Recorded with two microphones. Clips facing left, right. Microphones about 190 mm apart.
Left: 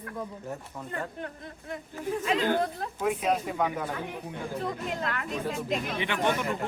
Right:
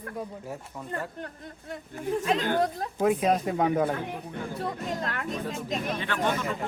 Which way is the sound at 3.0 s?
40° right (ahead or behind).